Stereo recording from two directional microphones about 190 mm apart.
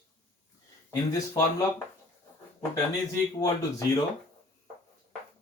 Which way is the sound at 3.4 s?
20° left (ahead or behind).